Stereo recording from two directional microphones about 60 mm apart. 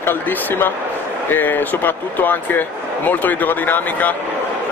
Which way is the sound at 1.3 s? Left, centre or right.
Left.